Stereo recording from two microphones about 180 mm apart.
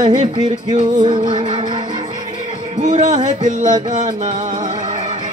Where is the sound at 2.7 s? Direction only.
40° right (ahead or behind).